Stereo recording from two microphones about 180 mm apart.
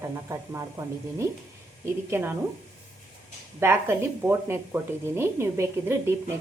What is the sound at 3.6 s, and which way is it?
A woman's voice, 15° right (ahead or behind).